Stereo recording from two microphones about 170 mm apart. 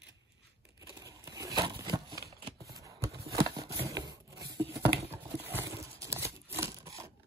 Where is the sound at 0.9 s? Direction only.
20° right (ahead or behind).